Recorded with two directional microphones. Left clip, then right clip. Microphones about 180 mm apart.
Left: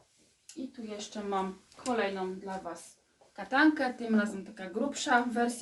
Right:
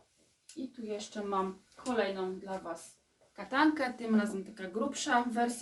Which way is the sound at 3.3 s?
15° right (ahead or behind).